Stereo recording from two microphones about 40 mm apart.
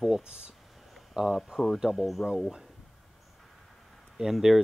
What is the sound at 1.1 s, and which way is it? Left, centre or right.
Speech, right.